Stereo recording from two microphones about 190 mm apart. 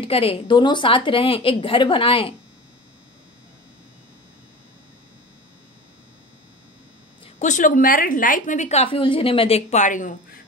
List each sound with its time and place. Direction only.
0.0 s a woman's voice: 30° left (ahead or behind)
7.3 s a woman's voice: 40° left (ahead or behind)